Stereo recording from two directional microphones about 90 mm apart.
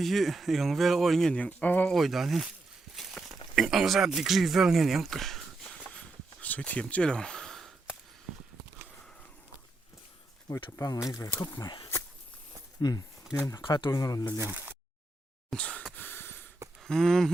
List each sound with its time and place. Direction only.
0.0 s speech: centre (ahead or behind); by 1.9 s 15° left (ahead or behind)
1.9 s speech: centre (ahead or behind)
5.9 s a sound: 15° left (ahead or behind)
10.8 s speech: 35° left (ahead or behind)
11.5 s speech: 55° left (ahead or behind)
13.6 s speech: 65° left (ahead or behind)
13.9 s speech: 40° left (ahead or behind)
14.5 s a sound: 20° right (ahead or behind)
15.5 s a sound: 15° left (ahead or behind)
16.0 s gasp: 25° left (ahead or behind)
16.8 s speech: 5° left (ahead or behind)